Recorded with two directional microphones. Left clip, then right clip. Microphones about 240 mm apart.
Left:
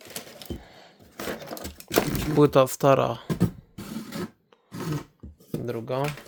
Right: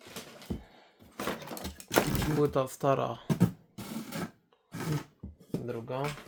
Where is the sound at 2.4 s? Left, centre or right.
Left.